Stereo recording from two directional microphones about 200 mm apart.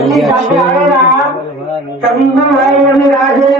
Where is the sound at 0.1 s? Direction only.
Centre (ahead or behind).